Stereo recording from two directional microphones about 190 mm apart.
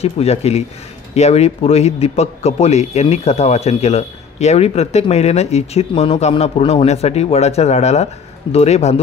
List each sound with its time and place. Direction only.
0.0 s speech: 35° left (ahead or behind)